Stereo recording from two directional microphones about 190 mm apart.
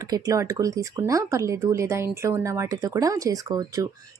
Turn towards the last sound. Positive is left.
turn(degrees=-20)  # may be behind; listen again after turning